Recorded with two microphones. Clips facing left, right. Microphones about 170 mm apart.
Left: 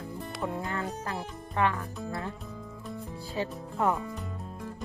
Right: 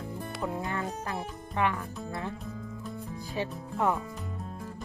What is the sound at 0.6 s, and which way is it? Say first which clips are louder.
Music: even; 20° right (ahead or behind).